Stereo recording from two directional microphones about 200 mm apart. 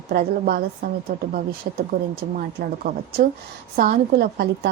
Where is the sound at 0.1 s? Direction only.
50° right (ahead or behind).